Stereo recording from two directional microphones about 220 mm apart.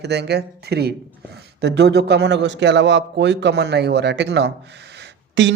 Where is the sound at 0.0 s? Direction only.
50° right (ahead or behind).